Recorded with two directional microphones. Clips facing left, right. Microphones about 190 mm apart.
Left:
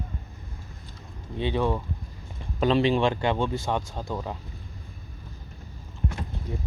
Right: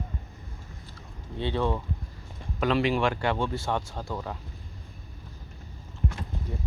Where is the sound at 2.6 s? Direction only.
25° left (ahead or behind).